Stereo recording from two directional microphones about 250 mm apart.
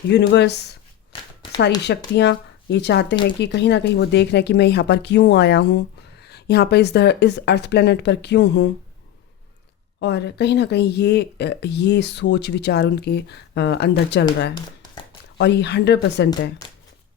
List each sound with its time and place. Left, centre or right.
0.1 s speech: left
2.1 s speech: left
10.0 s speech: left